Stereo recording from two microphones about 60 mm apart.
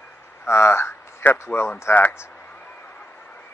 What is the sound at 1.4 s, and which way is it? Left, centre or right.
Speech, left.